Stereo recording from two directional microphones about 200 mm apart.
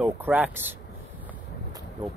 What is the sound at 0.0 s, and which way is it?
Speech, 10° right (ahead or behind).